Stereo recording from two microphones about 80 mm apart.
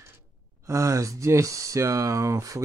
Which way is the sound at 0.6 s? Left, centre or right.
Right.